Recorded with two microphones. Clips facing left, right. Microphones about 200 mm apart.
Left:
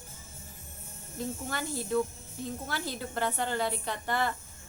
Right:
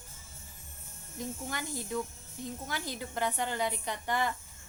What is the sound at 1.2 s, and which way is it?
A woman's voice, 15° right (ahead or behind).